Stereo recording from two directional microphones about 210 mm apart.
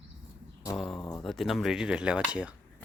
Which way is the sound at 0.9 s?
15° left (ahead or behind).